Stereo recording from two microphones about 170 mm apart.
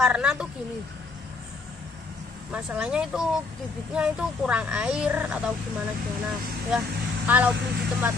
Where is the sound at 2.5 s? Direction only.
5° right (ahead or behind).